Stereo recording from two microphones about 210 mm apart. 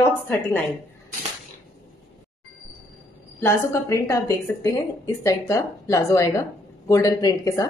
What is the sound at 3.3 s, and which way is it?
A woman's voice, 15° left (ahead or behind).